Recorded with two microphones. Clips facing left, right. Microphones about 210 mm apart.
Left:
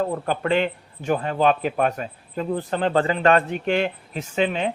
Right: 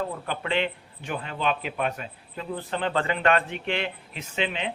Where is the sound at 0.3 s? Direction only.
45° left (ahead or behind).